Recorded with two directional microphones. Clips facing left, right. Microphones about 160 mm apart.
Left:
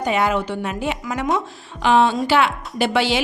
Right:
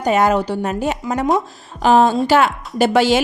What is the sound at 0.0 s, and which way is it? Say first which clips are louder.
A woman's voice: right 4 dB; 45° right (ahead or behind).